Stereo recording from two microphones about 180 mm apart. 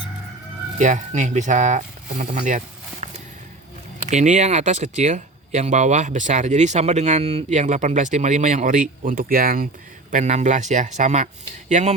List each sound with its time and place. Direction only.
0.8 s speech: 45° right (ahead or behind)
10.1 s speech: 40° right (ahead or behind)